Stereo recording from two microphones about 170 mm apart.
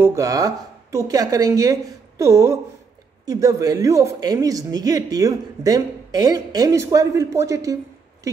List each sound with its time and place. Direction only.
0.0 s speech: 20° right (ahead or behind)